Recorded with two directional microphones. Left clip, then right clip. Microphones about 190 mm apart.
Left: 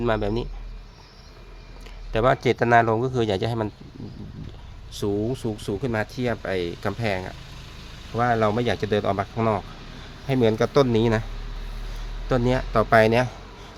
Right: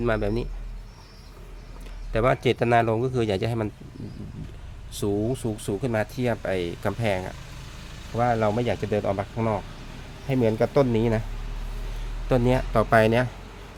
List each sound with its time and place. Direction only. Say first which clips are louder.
0.0 s speech: left 1 dB; 5° left (ahead or behind)
2.1 s speech: left 2 dB; 5° left (ahead or behind)
4.9 s speech: left 1 dB; 5° left (ahead or behind)
12.3 s speech: even; centre (ahead or behind)